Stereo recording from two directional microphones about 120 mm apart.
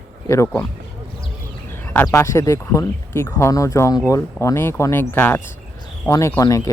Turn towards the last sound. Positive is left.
turn(degrees=25)  # may be behind; listen again after turning